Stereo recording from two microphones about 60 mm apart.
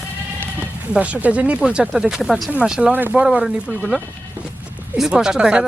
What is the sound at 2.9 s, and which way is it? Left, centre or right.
Speech, right.